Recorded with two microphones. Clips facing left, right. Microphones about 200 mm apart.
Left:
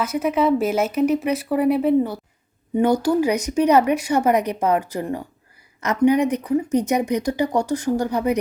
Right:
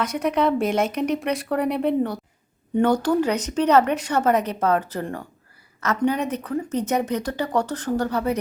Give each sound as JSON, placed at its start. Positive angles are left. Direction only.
{"t": 0.0, "sound": "a woman's voice", "side_deg": 5}